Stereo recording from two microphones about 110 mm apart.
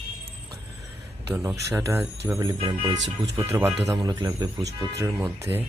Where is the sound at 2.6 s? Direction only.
55° right (ahead or behind).